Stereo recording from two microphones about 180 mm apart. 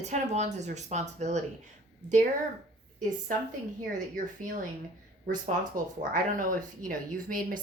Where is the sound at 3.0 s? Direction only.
45° right (ahead or behind).